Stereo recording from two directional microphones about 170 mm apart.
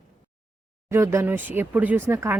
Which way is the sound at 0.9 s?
15° right (ahead or behind).